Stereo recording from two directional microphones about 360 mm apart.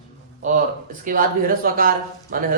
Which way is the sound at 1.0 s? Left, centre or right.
Right.